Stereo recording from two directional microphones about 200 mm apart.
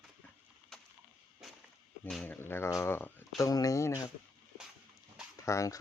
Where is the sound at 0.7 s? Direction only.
Centre (ahead or behind).